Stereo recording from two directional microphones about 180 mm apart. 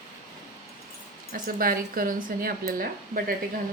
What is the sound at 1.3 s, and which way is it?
A woman's voice, 55° right (ahead or behind).